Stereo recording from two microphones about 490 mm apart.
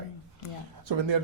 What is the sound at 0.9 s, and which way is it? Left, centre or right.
Speech, right.